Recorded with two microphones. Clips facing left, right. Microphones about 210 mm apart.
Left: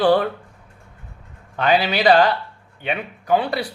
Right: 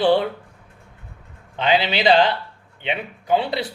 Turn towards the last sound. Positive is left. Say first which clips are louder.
# left 1 dB
turn(degrees=-25)  # may be behind; listen again after turning